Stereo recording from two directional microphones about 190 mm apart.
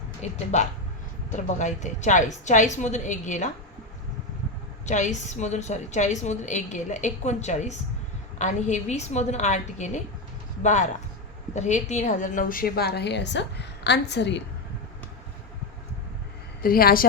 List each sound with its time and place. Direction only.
0.2 s a woman's voice: 40° left (ahead or behind)
4.9 s a woman's voice: 40° left (ahead or behind); by 14.4 s 65° left (ahead or behind)
16.6 s a woman's voice: 50° left (ahead or behind)